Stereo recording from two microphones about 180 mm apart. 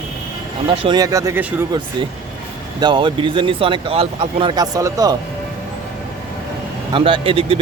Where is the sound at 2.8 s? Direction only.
25° right (ahead or behind).